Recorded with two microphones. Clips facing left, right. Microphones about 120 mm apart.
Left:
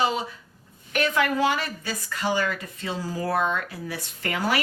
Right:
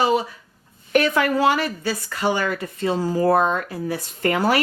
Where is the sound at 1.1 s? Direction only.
40° right (ahead or behind).